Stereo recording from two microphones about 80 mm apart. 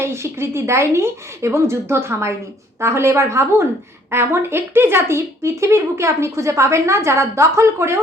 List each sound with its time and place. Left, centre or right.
0.0 s speech: right